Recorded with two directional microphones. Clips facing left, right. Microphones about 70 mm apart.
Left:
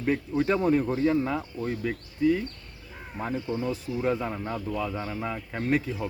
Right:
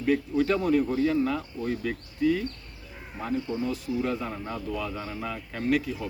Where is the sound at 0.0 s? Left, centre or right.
Left.